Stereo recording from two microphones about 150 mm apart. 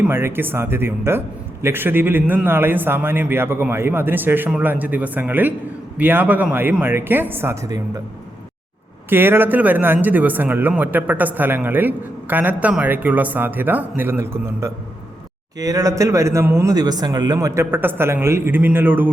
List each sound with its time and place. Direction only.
0.0 s a man's voice: 15° right (ahead or behind)
9.0 s a man's voice: 15° right (ahead or behind)